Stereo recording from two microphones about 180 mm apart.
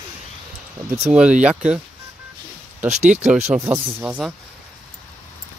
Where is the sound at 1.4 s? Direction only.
5° right (ahead or behind).